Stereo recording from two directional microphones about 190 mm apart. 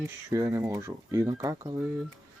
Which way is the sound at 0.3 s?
15° right (ahead or behind).